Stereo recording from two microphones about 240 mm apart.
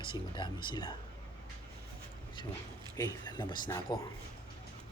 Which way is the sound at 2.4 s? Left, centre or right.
Centre.